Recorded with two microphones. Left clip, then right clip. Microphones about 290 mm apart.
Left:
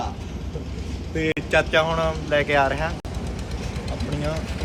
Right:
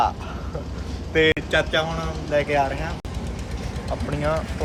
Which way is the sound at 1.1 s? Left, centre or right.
Centre.